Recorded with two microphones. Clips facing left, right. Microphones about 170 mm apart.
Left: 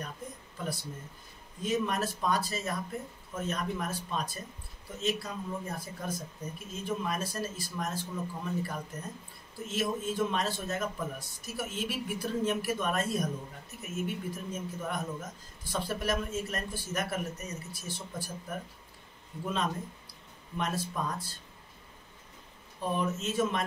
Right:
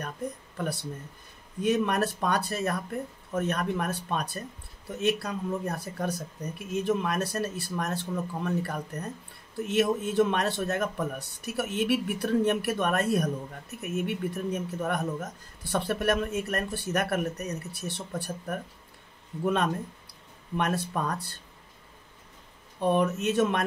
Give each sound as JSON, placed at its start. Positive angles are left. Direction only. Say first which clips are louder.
{"t": 1.6, "sound": "speech", "louder": "right 5 dB", "side_deg": -65}
{"t": 22.8, "sound": "speech", "louder": "right 7 dB", "side_deg": -65}